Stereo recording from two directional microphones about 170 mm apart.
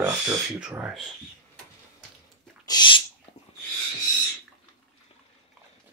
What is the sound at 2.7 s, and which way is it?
Sneeze, 25° left (ahead or behind).